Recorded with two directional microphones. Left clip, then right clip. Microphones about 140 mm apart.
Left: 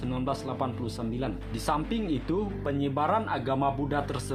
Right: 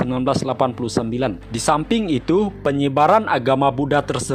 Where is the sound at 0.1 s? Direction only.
55° right (ahead or behind).